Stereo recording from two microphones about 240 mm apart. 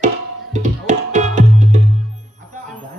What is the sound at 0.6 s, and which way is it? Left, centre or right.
Music, right.